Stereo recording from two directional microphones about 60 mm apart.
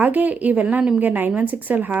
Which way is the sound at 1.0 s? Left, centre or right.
Right.